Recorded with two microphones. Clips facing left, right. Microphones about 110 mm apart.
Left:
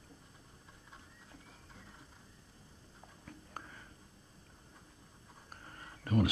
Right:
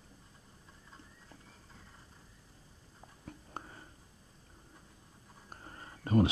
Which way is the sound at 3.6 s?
25° right (ahead or behind).